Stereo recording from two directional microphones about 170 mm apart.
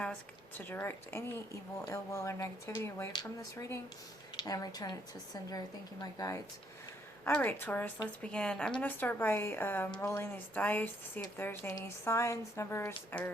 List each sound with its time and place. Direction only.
0.6 s a woman's voice: 15° left (ahead or behind)